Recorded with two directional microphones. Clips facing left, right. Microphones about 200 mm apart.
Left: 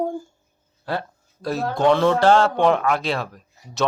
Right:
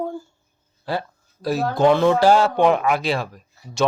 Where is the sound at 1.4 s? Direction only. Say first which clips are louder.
Right 2 dB; 5° right (ahead or behind).